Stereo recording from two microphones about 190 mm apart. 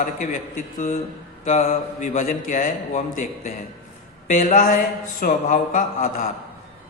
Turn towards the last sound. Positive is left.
turn(degrees=40)  # may be behind; listen again after turning